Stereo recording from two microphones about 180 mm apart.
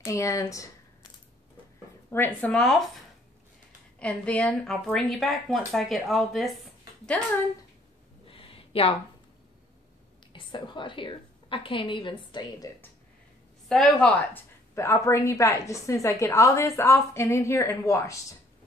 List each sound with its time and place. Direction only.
0.0 s a woman's voice: 15° left (ahead or behind)
2.0 s a woman's voice: 10° left (ahead or behind)
4.0 s a woman's voice: 5° left (ahead or behind)
8.3 s a sound: 30° left (ahead or behind)
10.3 s a woman's voice: 30° left (ahead or behind)
13.7 s a woman's voice: 5° left (ahead or behind)